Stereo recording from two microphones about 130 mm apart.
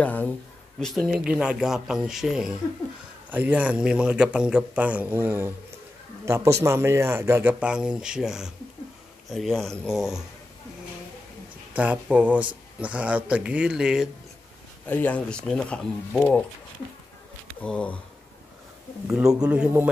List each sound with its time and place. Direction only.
0.0 s speech: 15° left (ahead or behind)
0.7 s a man's voice: centre (ahead or behind); by 7.5 s 20° right (ahead or behind)
7.6 s speech: 5° right (ahead or behind)
11.7 s speech: 10° right (ahead or behind)
14.9 s speech: 10° left (ahead or behind)
17.6 s speech: 10° left (ahead or behind)
19.1 s speech: 10° right (ahead or behind)